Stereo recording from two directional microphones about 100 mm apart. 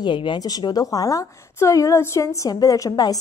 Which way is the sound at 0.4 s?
40° left (ahead or behind).